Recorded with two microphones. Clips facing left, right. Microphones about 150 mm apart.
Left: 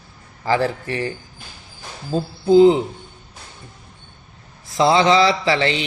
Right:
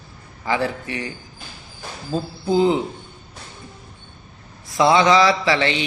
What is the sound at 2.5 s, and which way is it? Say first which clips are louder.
Mantra: left 6 dB; 30° left (ahead or behind).